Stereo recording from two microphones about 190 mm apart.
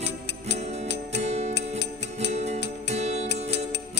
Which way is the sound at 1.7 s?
65° left (ahead or behind).